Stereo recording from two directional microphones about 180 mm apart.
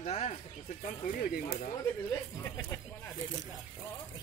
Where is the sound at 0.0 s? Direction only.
35° left (ahead or behind).